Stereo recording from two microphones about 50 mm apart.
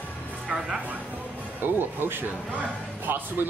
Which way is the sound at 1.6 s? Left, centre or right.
Right.